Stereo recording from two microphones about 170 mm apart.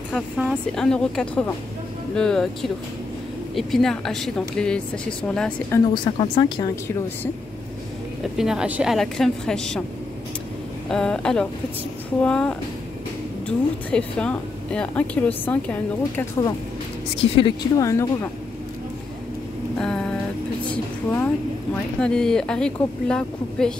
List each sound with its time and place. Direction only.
0.1 s a woman's voice: centre (ahead or behind)
6.1 s speech: 30° left (ahead or behind)
8.2 s a woman's voice: 5° right (ahead or behind)
10.9 s a woman's voice: 5° left (ahead or behind)
17.4 s speech: 30° left (ahead or behind)
17.8 s speech: 15° left (ahead or behind)
19.8 s vehicle: 5° left (ahead or behind)
20.6 s a woman's voice: 10° left (ahead or behind)